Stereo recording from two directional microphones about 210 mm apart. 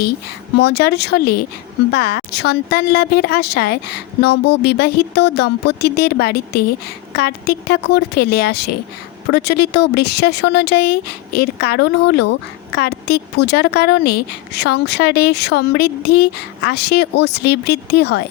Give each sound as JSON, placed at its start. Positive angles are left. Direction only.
{"t": 0.5, "sound": "speech", "side_deg": 50}